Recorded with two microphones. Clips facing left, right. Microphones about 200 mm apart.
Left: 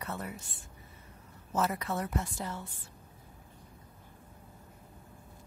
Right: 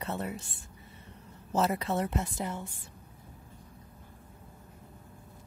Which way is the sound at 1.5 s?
25° right (ahead or behind).